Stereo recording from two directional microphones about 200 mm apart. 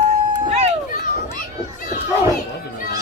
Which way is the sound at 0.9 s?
40° left (ahead or behind).